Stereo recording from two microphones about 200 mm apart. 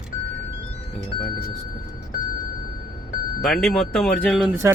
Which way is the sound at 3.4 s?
Centre (ahead or behind).